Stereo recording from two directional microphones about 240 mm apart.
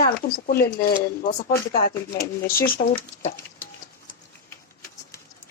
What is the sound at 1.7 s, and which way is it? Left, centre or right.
Speech, left.